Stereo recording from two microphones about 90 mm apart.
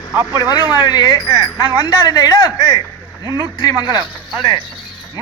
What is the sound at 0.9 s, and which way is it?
A man's voice, 50° left (ahead or behind).